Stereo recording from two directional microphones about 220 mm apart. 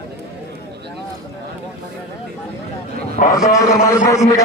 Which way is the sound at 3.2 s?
40° left (ahead or behind).